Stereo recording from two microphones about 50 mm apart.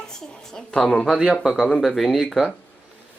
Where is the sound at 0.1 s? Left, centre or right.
Centre.